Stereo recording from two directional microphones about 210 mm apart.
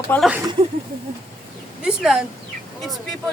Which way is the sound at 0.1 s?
10° left (ahead or behind).